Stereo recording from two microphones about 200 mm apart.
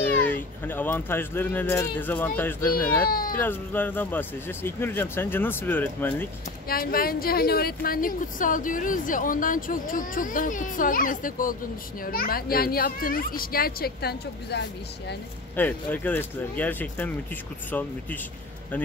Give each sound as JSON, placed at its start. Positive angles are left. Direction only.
{"t": 0.2, "sound": "speech", "side_deg": 10}
{"t": 3.1, "sound": "speech", "side_deg": 45}
{"t": 3.4, "sound": "speech", "side_deg": 10}
{"t": 6.7, "sound": "a woman's voice", "side_deg": 45}
{"t": 15.5, "sound": "speech", "side_deg": 10}